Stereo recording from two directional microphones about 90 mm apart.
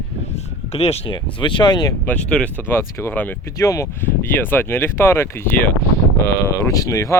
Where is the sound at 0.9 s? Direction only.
65° left (ahead or behind).